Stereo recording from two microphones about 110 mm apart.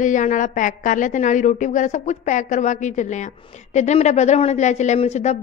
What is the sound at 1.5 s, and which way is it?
A woman's voice, 90° left.